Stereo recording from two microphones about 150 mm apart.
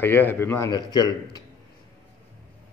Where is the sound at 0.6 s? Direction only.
25° left (ahead or behind).